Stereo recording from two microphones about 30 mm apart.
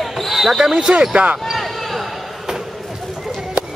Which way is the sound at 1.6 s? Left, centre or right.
Centre.